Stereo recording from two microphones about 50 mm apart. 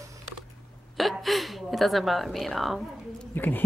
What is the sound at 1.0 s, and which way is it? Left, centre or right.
A woman's voice, centre.